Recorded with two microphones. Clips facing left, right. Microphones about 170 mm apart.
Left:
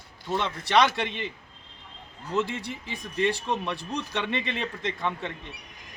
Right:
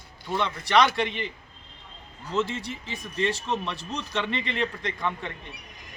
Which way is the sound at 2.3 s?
15° left (ahead or behind).